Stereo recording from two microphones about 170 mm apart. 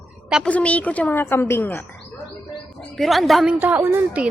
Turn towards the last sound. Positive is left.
turn(degrees=-10)  # may be behind; listen again after turning